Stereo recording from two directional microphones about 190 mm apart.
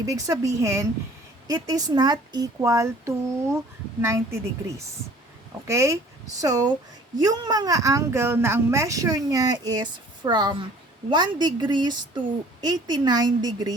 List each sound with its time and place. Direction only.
0.0 s speech: 15° right (ahead or behind)
5.6 s a woman's voice: 15° right (ahead or behind)